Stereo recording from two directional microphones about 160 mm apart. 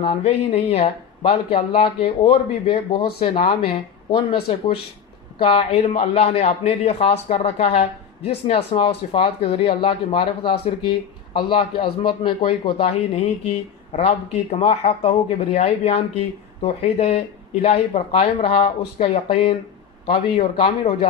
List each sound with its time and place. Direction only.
0.0 s a man's voice: 35° left (ahead or behind)
5.4 s a man's voice: 35° left (ahead or behind)